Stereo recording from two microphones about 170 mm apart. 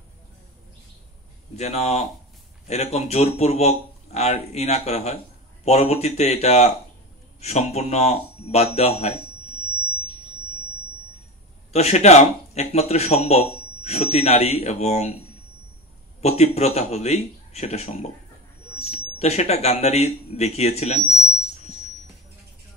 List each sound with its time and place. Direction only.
1.6 s speech: 40° left (ahead or behind)
11.7 s speech: 40° left (ahead or behind)
16.2 s speech: 40° left (ahead or behind)